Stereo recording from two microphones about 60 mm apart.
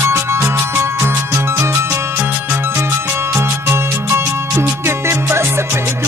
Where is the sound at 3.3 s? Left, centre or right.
Right.